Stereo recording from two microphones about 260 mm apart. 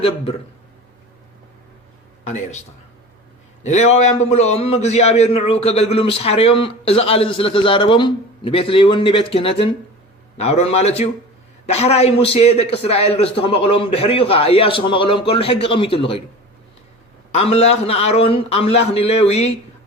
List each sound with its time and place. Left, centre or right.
2.2 s a man's voice: left
3.6 s a man's voice: left
17.3 s a man's voice: left